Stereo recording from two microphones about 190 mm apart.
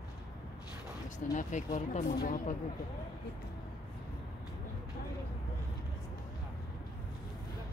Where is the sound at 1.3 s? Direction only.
40° left (ahead or behind).